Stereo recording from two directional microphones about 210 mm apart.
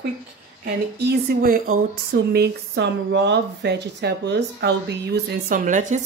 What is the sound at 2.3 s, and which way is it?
Speech, 55° right (ahead or behind).